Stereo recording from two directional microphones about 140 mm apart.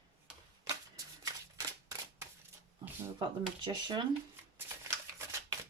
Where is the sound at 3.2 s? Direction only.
35° right (ahead or behind).